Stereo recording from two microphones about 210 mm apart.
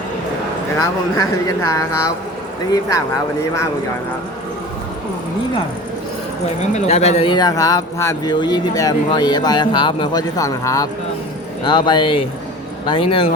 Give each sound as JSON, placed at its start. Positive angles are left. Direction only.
{"t": 0.8, "sound": "speech", "side_deg": 15}
{"t": 6.6, "sound": "speech", "side_deg": 35}